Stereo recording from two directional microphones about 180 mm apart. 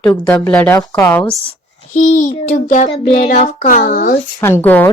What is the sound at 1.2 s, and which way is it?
A child's voice, 35° left (ahead or behind).